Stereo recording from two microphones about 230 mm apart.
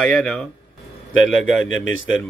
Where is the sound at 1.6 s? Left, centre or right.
Left.